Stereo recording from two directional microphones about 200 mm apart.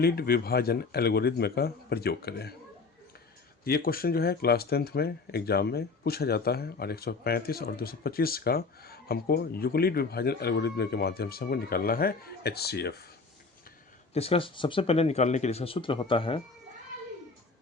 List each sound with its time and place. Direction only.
0.0 s speech: 50° left (ahead or behind)
3.6 s speech: 50° left (ahead or behind)
14.1 s speech: 30° left (ahead or behind)